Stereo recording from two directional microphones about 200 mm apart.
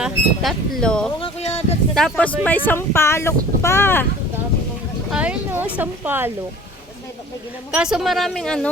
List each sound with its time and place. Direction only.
0.0 s speech: centre (ahead or behind)
1.2 s speech: 30° left (ahead or behind)
2.0 s speech: 5° left (ahead or behind)
5.1 s speech: 5° right (ahead or behind)
7.7 s speech: 5° right (ahead or behind)